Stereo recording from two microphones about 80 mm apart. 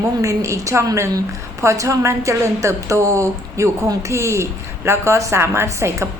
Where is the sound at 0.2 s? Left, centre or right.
Right.